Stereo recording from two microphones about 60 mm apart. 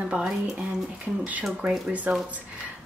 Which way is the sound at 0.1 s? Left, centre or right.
Centre.